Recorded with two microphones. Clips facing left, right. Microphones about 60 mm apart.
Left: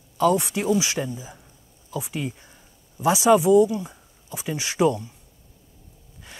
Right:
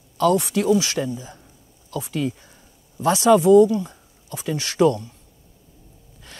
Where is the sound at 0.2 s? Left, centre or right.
Left.